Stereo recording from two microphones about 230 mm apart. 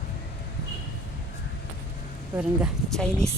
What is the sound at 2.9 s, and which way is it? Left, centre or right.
Speech, centre.